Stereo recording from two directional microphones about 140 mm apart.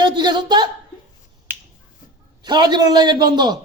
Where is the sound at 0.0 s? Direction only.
30° right (ahead or behind).